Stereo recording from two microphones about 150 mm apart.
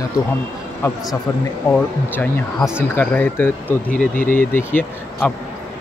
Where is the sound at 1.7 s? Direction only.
15° left (ahead or behind).